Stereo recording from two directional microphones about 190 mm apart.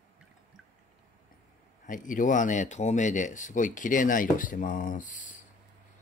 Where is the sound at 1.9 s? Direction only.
45° left (ahead or behind).